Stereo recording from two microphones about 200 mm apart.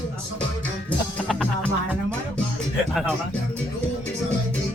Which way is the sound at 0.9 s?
5° left (ahead or behind).